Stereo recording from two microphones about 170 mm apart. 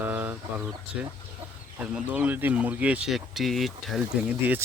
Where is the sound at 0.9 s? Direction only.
5° right (ahead or behind).